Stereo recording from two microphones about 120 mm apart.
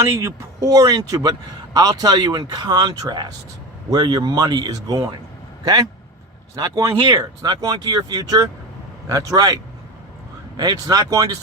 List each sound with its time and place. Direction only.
0.0 s a man's voice: 25° right (ahead or behind)
6.6 s a man's voice: 35° right (ahead or behind)
10.6 s a man's voice: 30° right (ahead or behind)